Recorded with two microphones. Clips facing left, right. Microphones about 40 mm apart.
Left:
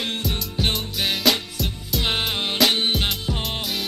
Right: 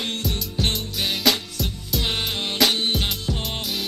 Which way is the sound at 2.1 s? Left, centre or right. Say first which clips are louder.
Left 4 dB; centre.